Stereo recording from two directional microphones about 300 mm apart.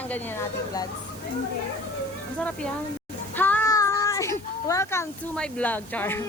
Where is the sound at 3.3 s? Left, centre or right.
Centre.